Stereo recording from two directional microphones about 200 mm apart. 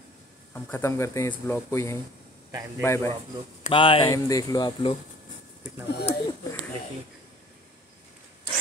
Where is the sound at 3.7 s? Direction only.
25° left (ahead or behind).